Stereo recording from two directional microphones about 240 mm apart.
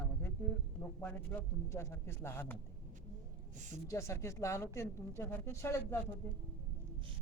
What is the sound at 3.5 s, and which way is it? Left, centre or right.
Speech, right.